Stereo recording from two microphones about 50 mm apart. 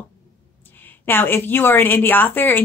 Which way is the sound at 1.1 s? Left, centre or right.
Left.